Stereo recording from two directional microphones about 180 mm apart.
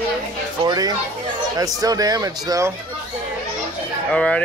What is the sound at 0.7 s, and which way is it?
Speech, 20° right (ahead or behind).